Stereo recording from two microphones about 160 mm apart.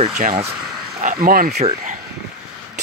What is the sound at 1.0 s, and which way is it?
Speech, 60° right (ahead or behind).